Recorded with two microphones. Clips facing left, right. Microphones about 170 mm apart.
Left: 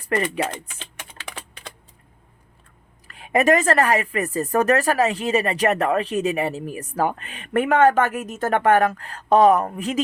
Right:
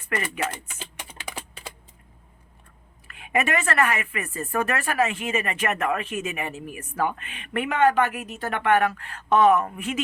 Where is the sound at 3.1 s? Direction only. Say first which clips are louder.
Left 7 dB; 35° left (ahead or behind).